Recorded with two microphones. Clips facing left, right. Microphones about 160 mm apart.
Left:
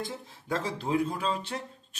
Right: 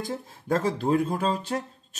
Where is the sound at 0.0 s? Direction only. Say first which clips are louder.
Right 4 dB; 45° right (ahead or behind).